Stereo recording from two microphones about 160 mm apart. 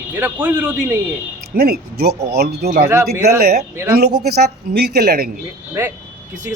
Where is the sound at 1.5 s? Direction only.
70° right (ahead or behind).